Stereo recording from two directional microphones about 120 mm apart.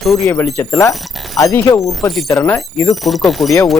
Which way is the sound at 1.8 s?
Centre (ahead or behind).